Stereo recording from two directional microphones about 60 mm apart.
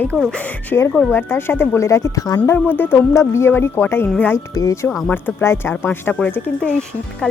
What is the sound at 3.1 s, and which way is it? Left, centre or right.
Speech, left.